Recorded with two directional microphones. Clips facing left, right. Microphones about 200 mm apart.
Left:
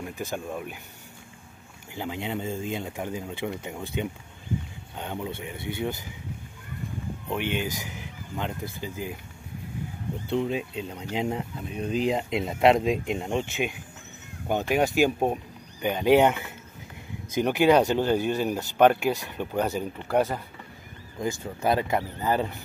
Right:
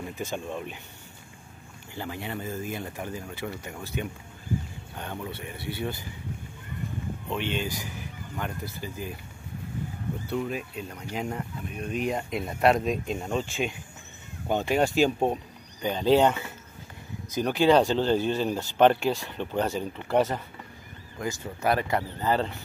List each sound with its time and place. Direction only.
0.2 s speech: 10° left (ahead or behind)
2.0 s speech: 15° left (ahead or behind)
7.2 s speech: 15° left (ahead or behind)
10.3 s speech: 25° left (ahead or behind)